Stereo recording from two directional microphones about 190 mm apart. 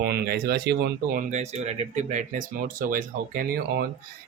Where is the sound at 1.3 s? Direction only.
35° right (ahead or behind).